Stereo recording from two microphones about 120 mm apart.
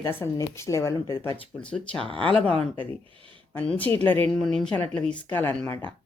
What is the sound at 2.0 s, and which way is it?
Speech, 45° right (ahead or behind).